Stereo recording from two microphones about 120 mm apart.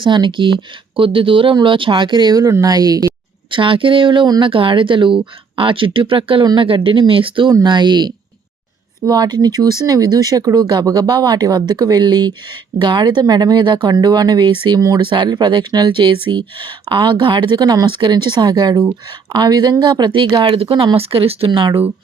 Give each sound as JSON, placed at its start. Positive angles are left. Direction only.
{"t": 0.0, "sound": "speech", "side_deg": -40}
{"t": 3.5, "sound": "speech", "side_deg": -45}
{"t": 6.4, "sound": "speech", "side_deg": -35}
{"t": 6.7, "sound": "speech", "side_deg": -45}